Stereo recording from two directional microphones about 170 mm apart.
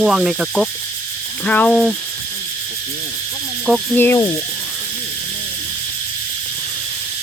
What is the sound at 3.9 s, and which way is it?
Cricket, 15° left (ahead or behind).